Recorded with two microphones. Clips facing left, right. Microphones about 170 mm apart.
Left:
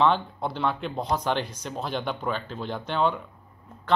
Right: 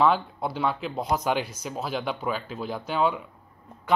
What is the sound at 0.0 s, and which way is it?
A man's voice, 5° right (ahead or behind).